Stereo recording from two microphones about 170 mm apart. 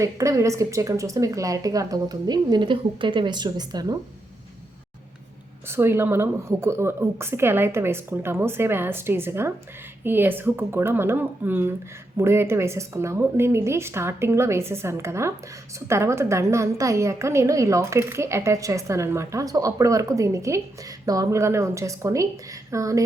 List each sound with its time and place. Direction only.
0.0 s a woman's voice: 20° right (ahead or behind)
5.6 s a woman's voice: 15° right (ahead or behind)